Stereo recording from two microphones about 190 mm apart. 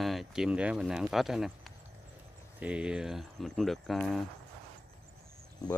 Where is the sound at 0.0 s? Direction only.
Centre (ahead or behind).